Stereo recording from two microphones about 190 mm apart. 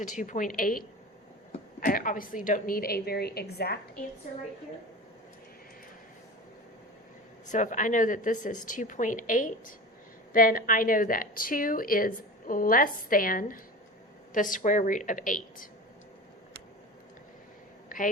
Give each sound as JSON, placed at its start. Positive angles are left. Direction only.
{"t": 0.0, "sound": "a woman's voice", "side_deg": 40}
{"t": 7.4, "sound": "a woman's voice", "side_deg": 40}
{"t": 17.8, "sound": "a sound", "side_deg": 45}